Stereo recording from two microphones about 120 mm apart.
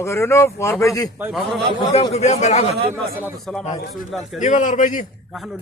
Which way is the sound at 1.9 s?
65° left (ahead or behind).